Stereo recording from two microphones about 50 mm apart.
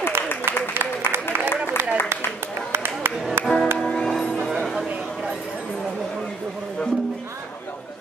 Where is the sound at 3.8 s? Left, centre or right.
Centre.